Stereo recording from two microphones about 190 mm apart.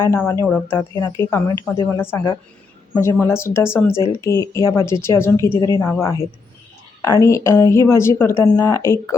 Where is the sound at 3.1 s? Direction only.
10° left (ahead or behind).